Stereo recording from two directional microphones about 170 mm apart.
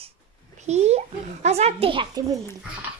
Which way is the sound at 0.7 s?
40° right (ahead or behind).